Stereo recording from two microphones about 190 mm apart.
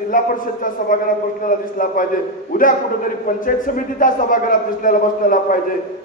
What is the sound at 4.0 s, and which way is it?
A man's voice, 45° left (ahead or behind).